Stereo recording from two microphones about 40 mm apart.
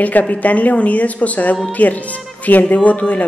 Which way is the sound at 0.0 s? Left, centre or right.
Left.